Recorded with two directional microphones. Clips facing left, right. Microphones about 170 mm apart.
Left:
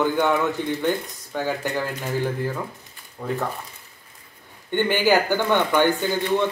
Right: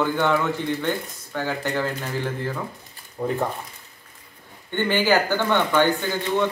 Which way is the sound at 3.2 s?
25° right (ahead or behind).